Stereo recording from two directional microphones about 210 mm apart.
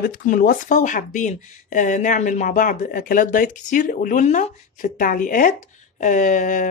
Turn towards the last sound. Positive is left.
turn(degrees=35)  # may be behind; listen again after turning